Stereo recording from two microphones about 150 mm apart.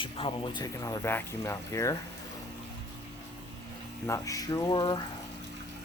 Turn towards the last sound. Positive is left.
turn(degrees=30)  # may be behind; listen again after turning